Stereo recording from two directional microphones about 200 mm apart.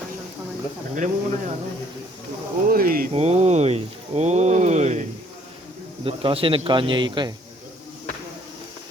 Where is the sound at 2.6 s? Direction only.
45° right (ahead or behind).